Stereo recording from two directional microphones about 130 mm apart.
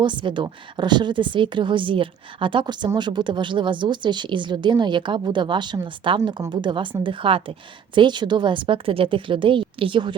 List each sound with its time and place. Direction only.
0.0 s a woman's voice: 40° right (ahead or behind)